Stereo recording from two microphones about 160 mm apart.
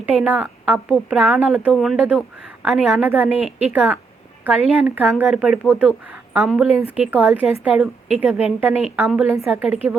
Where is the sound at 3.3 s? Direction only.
40° left (ahead or behind).